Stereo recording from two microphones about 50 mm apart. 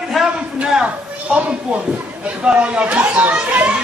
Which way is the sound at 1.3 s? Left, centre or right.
Right.